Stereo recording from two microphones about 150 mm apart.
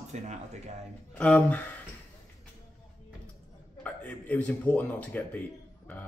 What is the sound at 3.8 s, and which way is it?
A man's voice, 10° left (ahead or behind).